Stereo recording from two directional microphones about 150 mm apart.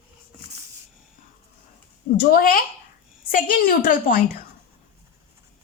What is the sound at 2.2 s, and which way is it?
A woman's voice, 80° left.